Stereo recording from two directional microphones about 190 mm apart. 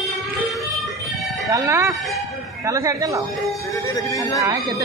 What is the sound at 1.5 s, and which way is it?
Speech, 15° right (ahead or behind).